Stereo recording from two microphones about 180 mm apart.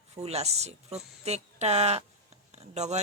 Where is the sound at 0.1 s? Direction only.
35° right (ahead or behind).